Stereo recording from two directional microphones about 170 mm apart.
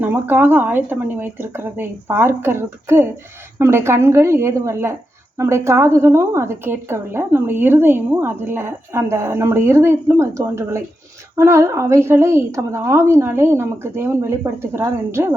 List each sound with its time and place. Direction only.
0.0 s a woman's voice: 10° right (ahead or behind)